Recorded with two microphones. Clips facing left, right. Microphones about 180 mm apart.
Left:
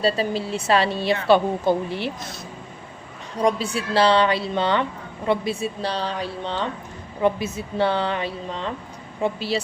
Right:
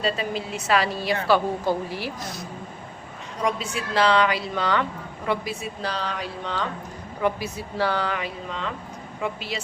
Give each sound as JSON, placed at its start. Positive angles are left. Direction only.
{"t": 0.0, "sound": "speech", "side_deg": 35}
{"t": 3.4, "sound": "speech", "side_deg": 35}